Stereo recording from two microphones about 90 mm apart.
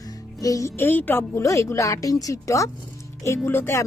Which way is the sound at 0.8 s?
20° left (ahead or behind).